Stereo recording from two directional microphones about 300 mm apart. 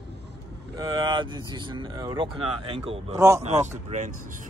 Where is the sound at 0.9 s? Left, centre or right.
Centre.